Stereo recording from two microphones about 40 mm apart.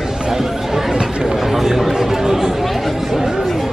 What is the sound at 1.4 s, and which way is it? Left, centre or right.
Chatter, centre.